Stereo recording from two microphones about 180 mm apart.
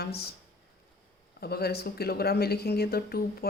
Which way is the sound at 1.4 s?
60° left (ahead or behind).